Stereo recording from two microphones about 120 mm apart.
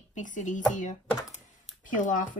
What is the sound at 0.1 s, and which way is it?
Speech, 90° left.